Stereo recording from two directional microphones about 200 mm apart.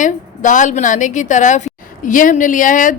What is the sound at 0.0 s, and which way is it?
A woman's voice, 40° left (ahead or behind).